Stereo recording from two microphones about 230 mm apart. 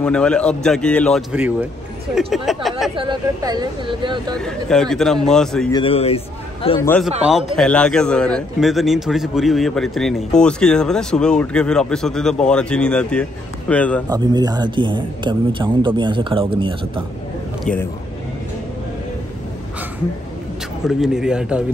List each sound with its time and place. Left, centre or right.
0.0 s a man's voice: centre
1.3 s a man's voice: centre
3.0 s a man's voice: centre
4.4 s a man's voice: centre
5.7 s a man's voice: left
6.8 s a man's voice: centre
14.0 s a man's voice: centre
17.7 s a man's voice: centre
20.8 s a man's voice: centre